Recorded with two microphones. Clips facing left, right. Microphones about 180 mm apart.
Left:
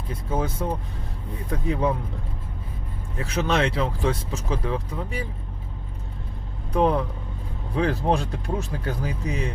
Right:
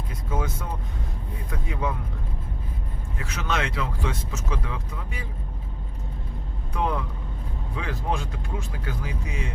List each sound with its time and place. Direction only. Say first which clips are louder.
0.1 s speech: left 4 dB; 30° left (ahead or behind)
3.2 s speech: left 6 dB; 35° left (ahead or behind)
6.7 s speech: left 7 dB; 35° left (ahead or behind)